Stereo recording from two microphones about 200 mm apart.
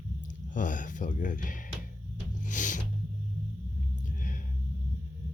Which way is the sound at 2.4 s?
40° left (ahead or behind).